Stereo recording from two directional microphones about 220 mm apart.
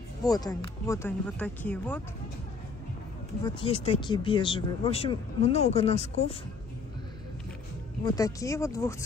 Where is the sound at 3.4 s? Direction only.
25° left (ahead or behind).